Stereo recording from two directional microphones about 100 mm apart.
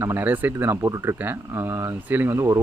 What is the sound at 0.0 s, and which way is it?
Speech, 25° right (ahead or behind).